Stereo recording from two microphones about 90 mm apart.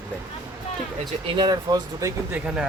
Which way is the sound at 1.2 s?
60° right (ahead or behind).